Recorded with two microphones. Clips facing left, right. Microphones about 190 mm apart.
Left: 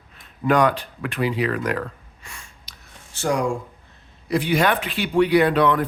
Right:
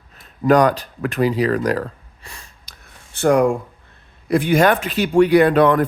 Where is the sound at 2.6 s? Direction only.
60° right (ahead or behind).